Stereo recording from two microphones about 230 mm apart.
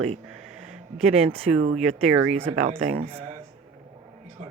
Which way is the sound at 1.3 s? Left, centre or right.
Right.